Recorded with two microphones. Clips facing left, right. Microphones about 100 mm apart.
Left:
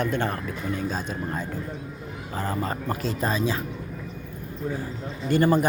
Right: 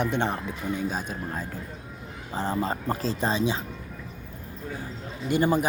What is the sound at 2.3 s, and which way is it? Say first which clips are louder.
Speech: right 1 dB; 25° right (ahead or behind).